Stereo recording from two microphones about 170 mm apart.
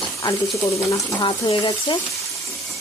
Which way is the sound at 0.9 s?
25° left (ahead or behind).